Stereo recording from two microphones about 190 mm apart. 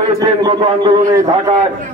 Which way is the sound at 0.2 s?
20° right (ahead or behind).